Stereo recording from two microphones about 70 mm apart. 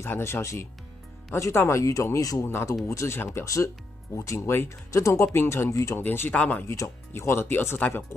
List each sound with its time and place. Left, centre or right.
0.0 s speech: left
2.4 s speech: left
6.0 s speech: left
6.3 s speech: centre
6.6 s speech: left